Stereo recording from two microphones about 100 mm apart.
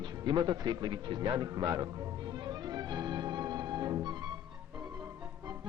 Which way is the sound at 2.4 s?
45° right (ahead or behind).